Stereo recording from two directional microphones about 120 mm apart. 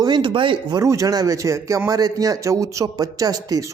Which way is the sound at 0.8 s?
25° right (ahead or behind).